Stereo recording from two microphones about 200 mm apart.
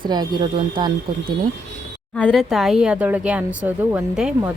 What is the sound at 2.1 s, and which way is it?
Speech, 5° left (ahead or behind).